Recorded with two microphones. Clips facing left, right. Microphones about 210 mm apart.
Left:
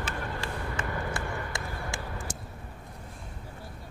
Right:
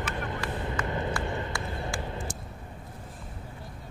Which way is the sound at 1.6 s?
20° right (ahead or behind).